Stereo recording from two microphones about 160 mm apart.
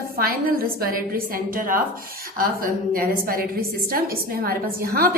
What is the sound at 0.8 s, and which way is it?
A woman's voice, 65° right (ahead or behind).